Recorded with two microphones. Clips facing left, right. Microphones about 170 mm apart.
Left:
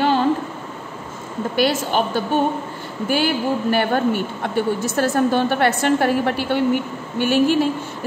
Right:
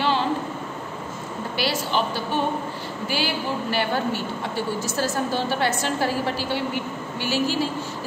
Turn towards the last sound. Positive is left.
turn(degrees=55)  # may be behind; listen again after turning